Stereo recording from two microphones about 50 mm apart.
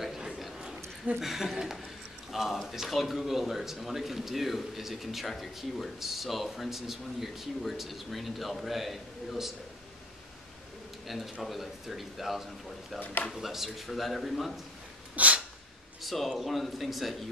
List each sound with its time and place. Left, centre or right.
0.0 s a sound: centre
1.2 s speech: centre
11.1 s speech: centre
13.0 s speech: left
13.3 s speech: centre
15.1 s a sound: right
16.0 s speech: centre